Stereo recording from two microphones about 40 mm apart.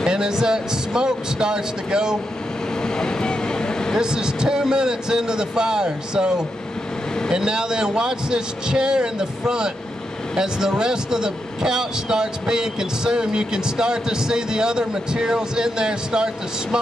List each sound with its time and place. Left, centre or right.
0.0 s speech: centre
2.8 s vehicle: centre
4.0 s a man's voice: centre